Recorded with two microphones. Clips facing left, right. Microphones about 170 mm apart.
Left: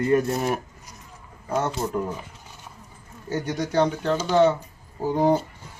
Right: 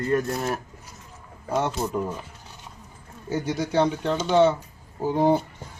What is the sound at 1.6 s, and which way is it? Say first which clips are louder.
Speech: even; 10° right (ahead or behind).